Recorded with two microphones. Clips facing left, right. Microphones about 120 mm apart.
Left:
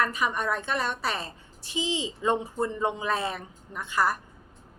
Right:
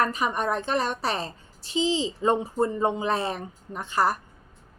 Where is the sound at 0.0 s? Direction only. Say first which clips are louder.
Right 2 dB; 35° right (ahead or behind).